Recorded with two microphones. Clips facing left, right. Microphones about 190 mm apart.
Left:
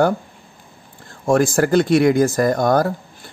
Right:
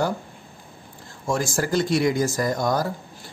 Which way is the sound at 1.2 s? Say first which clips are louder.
Left 9 dB; 55° left (ahead or behind).